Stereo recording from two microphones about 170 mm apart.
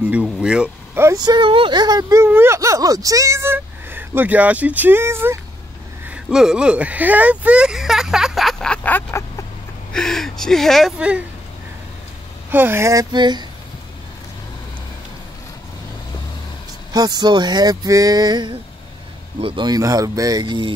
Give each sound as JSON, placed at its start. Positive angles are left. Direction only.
{"t": 0.0, "sound": "speech", "side_deg": -5}
{"t": 12.4, "sound": "speech", "side_deg": -10}
{"t": 16.9, "sound": "speech", "side_deg": -25}